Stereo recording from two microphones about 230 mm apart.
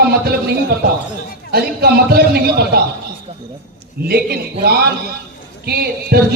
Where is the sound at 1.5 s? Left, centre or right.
Right.